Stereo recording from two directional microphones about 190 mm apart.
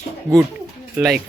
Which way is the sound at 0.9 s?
Centre (ahead or behind).